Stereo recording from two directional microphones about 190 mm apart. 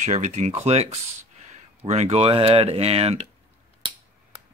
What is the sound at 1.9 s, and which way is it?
Speech, 35° right (ahead or behind).